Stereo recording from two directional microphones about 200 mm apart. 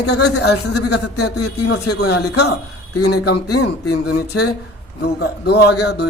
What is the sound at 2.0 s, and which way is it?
Speech, 90° left.